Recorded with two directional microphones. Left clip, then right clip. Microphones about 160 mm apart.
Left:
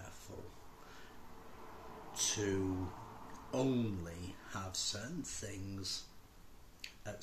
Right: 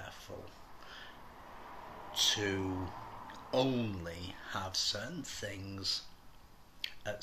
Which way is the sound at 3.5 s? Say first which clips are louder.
Right 4 dB; 15° left (ahead or behind).